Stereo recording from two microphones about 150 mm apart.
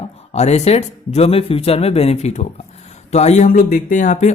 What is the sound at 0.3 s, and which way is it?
Speech, 45° left (ahead or behind).